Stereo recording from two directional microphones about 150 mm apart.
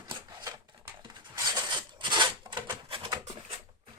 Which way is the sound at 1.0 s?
25° right (ahead or behind).